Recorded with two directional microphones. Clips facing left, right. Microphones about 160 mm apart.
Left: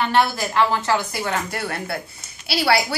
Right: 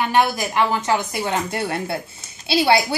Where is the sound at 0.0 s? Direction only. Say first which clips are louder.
Right 1 dB; 15° right (ahead or behind).